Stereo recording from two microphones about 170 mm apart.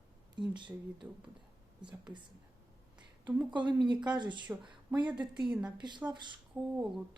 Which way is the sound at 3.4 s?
25° right (ahead or behind).